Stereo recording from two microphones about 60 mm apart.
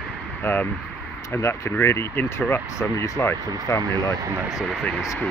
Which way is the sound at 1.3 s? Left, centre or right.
Left.